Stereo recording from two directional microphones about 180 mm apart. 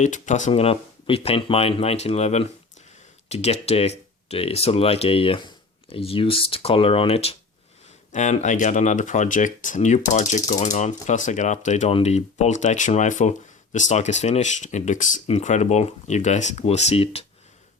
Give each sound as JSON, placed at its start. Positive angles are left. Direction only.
{"t": 0.0, "sound": "speech", "side_deg": 45}